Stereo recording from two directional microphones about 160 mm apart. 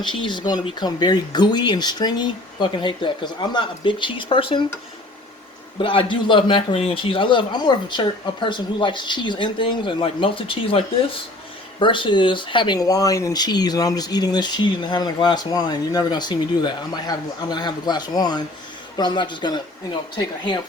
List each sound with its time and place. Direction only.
0.0 s a man's voice: 30° left (ahead or behind)
5.8 s a man's voice: 35° left (ahead or behind)